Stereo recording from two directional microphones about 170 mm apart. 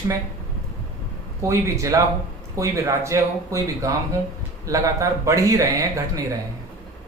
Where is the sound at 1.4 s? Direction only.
15° right (ahead or behind).